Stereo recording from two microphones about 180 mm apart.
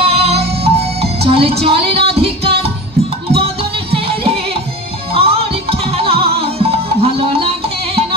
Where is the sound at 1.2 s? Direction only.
35° right (ahead or behind).